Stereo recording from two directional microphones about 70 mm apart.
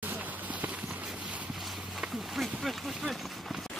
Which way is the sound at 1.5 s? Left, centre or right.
Centre.